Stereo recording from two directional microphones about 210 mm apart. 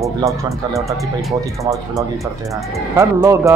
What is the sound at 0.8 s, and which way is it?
Speech, centre (ahead or behind).